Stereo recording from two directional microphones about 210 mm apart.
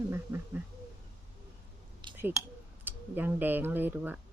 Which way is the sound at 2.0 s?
20° right (ahead or behind).